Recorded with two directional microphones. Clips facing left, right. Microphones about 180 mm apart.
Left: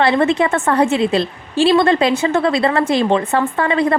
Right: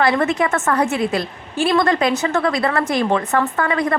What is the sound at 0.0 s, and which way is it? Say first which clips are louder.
A woman's voice: left 3 dB; 30° left (ahead or behind).